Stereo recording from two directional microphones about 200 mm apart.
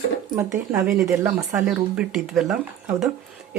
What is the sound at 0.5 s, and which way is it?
Speech, 10° right (ahead or behind).